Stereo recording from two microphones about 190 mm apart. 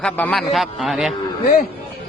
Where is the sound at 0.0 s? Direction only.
5° left (ahead or behind).